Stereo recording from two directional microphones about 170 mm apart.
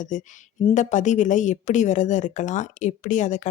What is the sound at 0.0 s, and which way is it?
Speech, 45° left (ahead or behind).